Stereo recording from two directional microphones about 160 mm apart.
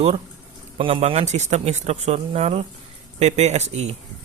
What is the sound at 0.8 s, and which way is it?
A man's voice, 35° right (ahead or behind).